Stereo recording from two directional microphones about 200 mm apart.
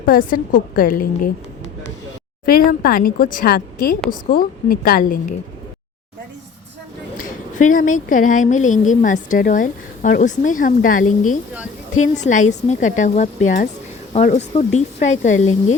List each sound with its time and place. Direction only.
0.0 s a woman's voice: 45° left (ahead or behind)
2.5 s a woman's voice: 45° left (ahead or behind)
7.6 s a woman's voice: 40° left (ahead or behind)